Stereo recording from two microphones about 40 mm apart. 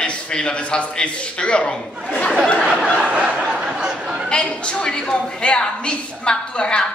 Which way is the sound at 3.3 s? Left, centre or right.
Right.